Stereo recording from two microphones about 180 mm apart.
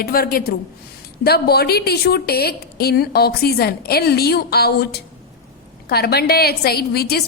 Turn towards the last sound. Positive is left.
turn(degrees=60)  # may be behind; listen again after turning